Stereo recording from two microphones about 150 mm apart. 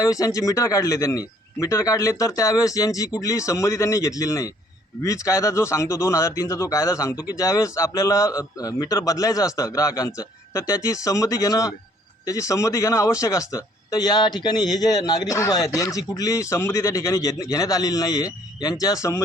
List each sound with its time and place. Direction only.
0.0 s a man's voice: 20° left (ahead or behind)